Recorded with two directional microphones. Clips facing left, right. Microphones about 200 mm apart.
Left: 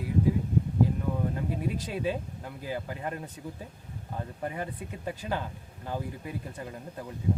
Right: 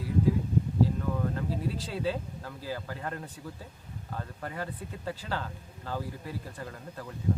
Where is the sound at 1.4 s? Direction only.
15° left (ahead or behind).